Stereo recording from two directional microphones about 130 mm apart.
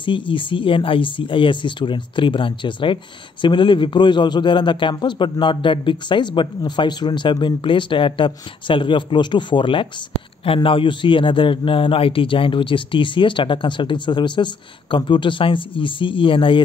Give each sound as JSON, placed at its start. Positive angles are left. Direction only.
{"t": 0.3, "sound": "speech", "side_deg": 40}